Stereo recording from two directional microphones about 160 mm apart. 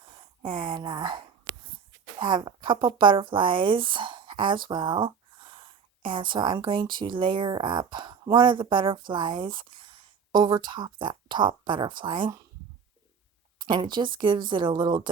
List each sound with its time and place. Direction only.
0.4 s speech: 35° right (ahead or behind)
13.6 s speech: 30° right (ahead or behind)